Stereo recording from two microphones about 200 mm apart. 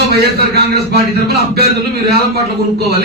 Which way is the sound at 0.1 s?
55° right (ahead or behind).